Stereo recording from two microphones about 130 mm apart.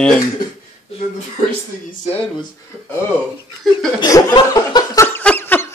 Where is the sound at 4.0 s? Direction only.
25° left (ahead or behind).